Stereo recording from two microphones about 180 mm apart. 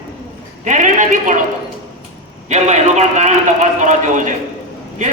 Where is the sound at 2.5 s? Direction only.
40° right (ahead or behind).